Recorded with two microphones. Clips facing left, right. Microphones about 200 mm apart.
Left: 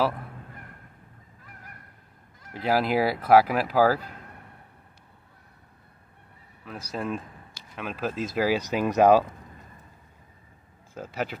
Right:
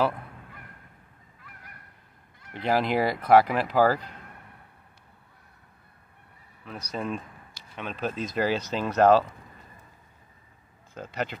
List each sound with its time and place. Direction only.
2.5 s speech: 5° left (ahead or behind)
6.6 s speech: 5° left (ahead or behind)
11.0 s speech: 5° left (ahead or behind)